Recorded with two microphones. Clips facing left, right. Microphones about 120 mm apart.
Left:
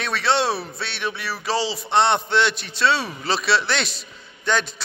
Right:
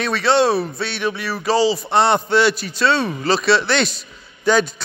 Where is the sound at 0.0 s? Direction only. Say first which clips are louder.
Right 5 dB; centre (ahead or behind).